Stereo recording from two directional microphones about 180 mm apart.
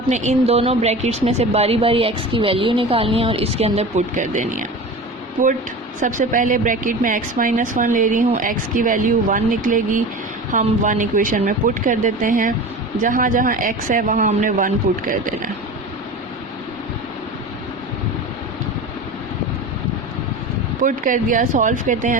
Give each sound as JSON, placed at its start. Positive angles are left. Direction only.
{"t": 0.1, "sound": "a woman's voice", "side_deg": -40}
{"t": 6.0, "sound": "a woman's voice", "side_deg": -45}
{"t": 20.8, "sound": "a woman's voice", "side_deg": -50}